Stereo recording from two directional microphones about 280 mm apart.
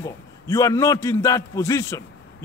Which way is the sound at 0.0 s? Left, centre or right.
Centre.